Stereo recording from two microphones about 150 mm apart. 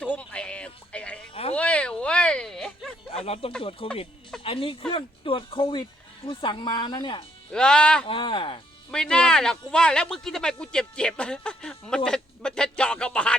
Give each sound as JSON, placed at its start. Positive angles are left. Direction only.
{"t": 0.0, "sound": "music", "side_deg": 10}
{"t": 1.3, "sound": "a sound", "side_deg": 40}
{"t": 1.5, "sound": "a sound", "side_deg": 10}
{"t": 3.2, "sound": "speech", "side_deg": 40}
{"t": 7.5, "sound": "speech", "side_deg": 5}
{"t": 8.0, "sound": "speech", "side_deg": 35}
{"t": 8.9, "sound": "speech", "side_deg": 5}